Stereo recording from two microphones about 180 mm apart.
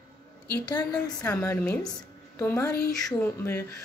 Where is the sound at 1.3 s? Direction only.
10° left (ahead or behind).